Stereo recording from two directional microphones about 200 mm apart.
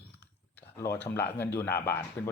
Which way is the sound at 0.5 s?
15° left (ahead or behind).